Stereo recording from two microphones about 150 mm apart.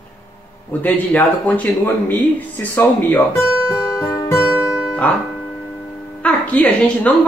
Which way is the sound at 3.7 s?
20° left (ahead or behind).